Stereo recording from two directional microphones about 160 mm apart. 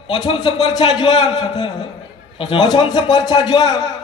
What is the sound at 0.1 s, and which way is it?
A man's voice, 30° left (ahead or behind).